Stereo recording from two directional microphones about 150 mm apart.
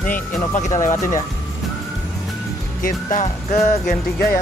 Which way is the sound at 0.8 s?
60° left (ahead or behind).